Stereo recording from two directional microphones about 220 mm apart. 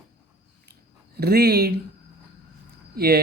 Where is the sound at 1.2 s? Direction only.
45° right (ahead or behind).